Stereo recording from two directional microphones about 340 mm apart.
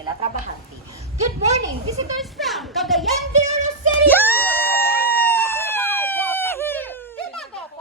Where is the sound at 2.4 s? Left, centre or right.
Centre.